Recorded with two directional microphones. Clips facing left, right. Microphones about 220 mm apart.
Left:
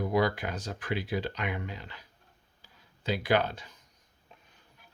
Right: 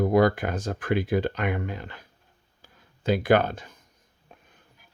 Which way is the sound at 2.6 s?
50° right (ahead or behind).